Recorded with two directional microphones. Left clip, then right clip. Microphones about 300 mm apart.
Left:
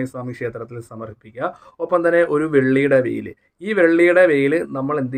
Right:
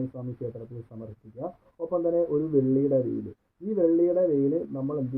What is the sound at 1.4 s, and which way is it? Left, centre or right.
Speech, left.